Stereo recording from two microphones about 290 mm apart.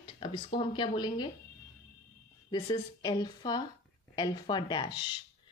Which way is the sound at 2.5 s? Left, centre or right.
Centre.